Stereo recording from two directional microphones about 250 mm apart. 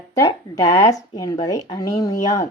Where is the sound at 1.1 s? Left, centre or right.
Centre.